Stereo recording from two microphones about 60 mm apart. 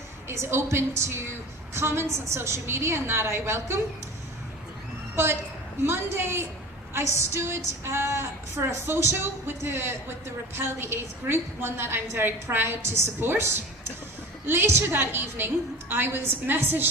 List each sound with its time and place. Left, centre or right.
0.3 s a woman's voice: right
5.1 s a woman's voice: right